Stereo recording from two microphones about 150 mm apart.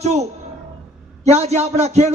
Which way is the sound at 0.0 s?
45° right (ahead or behind).